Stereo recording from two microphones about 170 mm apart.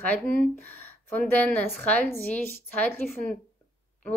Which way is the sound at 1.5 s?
10° left (ahead or behind).